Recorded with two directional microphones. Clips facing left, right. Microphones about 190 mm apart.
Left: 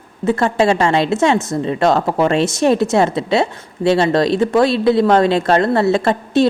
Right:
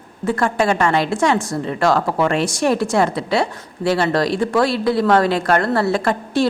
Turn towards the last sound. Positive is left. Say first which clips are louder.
# left 4 dB
turn(degrees=20)  # may be behind; listen again after turning